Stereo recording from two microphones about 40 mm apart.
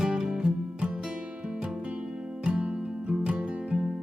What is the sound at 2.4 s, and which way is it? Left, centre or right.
Music, right.